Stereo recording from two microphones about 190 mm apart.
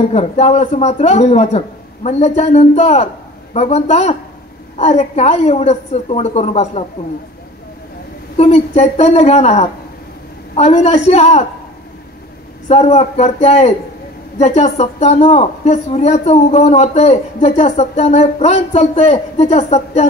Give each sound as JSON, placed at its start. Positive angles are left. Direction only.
{"t": 0.1, "sound": "speech", "side_deg": 35}
{"t": 8.4, "sound": "speech", "side_deg": 35}
{"t": 12.6, "sound": "speech", "side_deg": 35}